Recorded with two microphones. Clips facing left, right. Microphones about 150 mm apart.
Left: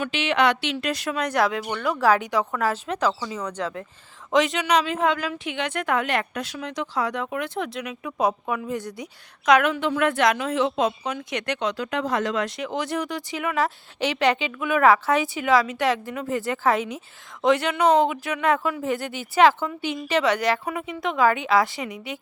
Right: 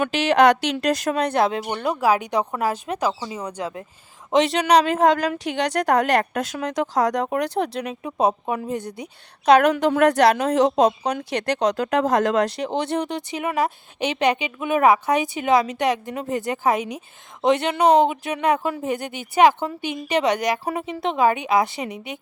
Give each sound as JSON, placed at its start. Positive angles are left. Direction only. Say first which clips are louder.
{"t": 0.1, "sound": "speech", "louder": "right 6 dB", "side_deg": -40}
{"t": 2.0, "sound": "speech", "louder": "even", "side_deg": -15}
{"t": 3.2, "sound": "speech", "louder": "even", "side_deg": -25}
{"t": 3.6, "sound": "speech", "louder": "even", "side_deg": -15}
{"t": 4.3, "sound": "speech", "louder": "right 3 dB", "side_deg": -30}
{"t": 20.7, "sound": "speech", "louder": "right 3 dB", "side_deg": -30}